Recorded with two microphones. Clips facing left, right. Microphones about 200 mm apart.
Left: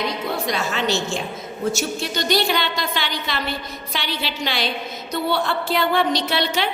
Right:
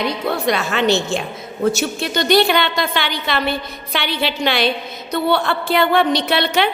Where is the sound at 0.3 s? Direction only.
65° right (ahead or behind).